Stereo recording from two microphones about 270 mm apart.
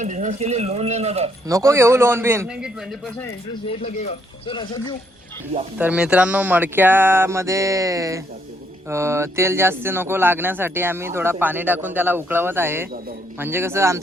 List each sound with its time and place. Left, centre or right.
0.0 s speech: right
1.5 s speech: centre
3.8 s speech: left
5.7 s speech: centre